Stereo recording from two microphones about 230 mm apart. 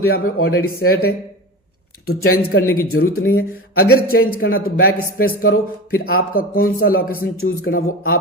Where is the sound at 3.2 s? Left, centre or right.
Left.